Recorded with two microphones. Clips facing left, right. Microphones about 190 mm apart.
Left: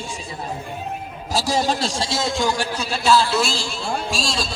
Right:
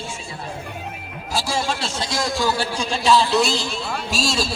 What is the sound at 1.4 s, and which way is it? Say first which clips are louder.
Speech: left 3 dB; 40° left (ahead or behind).